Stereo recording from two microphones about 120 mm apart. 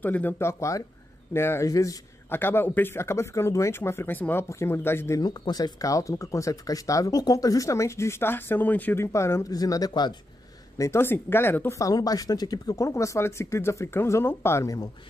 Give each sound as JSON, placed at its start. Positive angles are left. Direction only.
{"t": 0.0, "sound": "speech", "side_deg": 15}
{"t": 5.2, "sound": "speech", "side_deg": 35}
{"t": 10.8, "sound": "speech", "side_deg": 20}
{"t": 11.9, "sound": "speech", "side_deg": 30}